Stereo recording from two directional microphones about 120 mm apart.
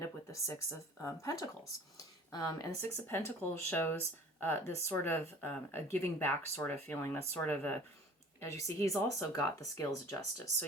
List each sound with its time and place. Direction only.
0.0 s speech: 25° left (ahead or behind)
2.8 s speech: 20° left (ahead or behind)
8.6 s speech: 25° left (ahead or behind)